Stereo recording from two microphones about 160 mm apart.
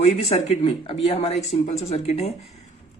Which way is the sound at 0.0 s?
40° left (ahead or behind).